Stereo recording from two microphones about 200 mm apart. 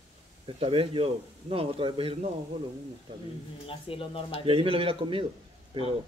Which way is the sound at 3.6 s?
25° left (ahead or behind).